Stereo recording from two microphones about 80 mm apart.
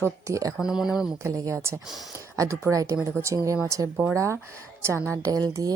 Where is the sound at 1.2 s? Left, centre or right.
Right.